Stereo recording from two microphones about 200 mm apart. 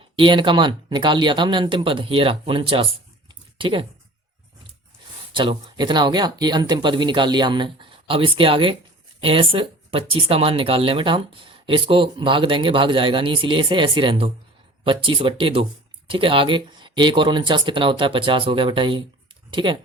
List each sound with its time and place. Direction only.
0.2 s speech: 25° right (ahead or behind)
5.3 s speech: 25° right (ahead or behind)